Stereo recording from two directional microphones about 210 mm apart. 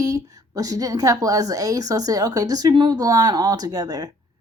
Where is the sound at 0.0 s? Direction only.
15° right (ahead or behind).